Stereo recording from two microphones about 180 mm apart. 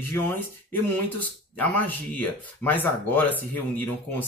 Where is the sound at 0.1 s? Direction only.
10° left (ahead or behind).